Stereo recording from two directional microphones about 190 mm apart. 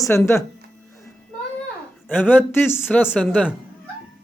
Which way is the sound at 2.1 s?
10° left (ahead or behind).